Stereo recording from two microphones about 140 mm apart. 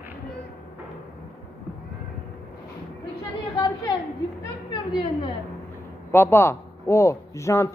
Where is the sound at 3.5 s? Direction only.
35° left (ahead or behind).